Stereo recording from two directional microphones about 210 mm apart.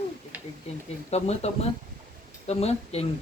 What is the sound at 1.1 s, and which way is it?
Speech, 30° left (ahead or behind).